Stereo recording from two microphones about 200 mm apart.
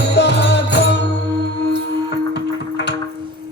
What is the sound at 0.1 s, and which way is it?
Music, 60° left (ahead or behind).